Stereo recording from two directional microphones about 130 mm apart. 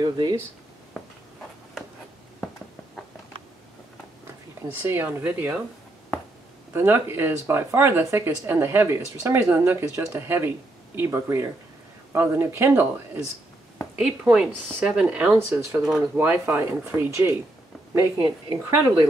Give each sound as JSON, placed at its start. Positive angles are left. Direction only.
{"t": 0.0, "sound": "speech", "side_deg": -30}
{"t": 4.6, "sound": "speech", "side_deg": -15}
{"t": 6.7, "sound": "speech", "side_deg": -20}
{"t": 13.9, "sound": "speech", "side_deg": -5}
{"t": 17.9, "sound": "speech", "side_deg": -20}